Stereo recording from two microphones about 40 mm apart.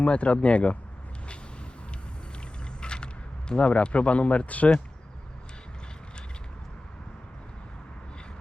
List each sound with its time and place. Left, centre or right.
0.0 s speech: left
2.8 s a sound: left
3.5 s speech: left